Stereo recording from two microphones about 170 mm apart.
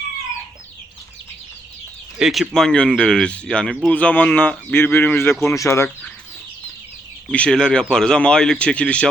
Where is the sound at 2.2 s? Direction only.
Centre (ahead or behind); by 5.9 s 15° left (ahead or behind).